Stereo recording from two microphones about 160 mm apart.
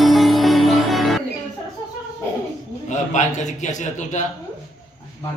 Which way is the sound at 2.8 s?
50° left (ahead or behind).